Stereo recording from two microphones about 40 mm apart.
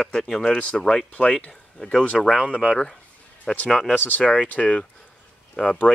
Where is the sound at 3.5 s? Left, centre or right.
Centre.